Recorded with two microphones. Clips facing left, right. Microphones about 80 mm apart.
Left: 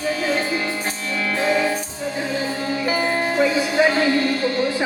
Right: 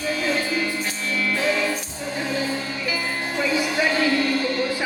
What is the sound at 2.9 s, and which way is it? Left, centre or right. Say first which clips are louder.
Music: left 7 dB; left.